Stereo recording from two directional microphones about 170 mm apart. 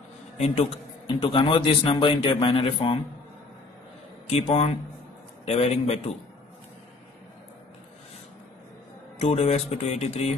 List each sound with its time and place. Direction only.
1.0 s a man's voice: 30° left (ahead or behind)
4.3 s a man's voice: 35° left (ahead or behind)
9.2 s a man's voice: 40° left (ahead or behind)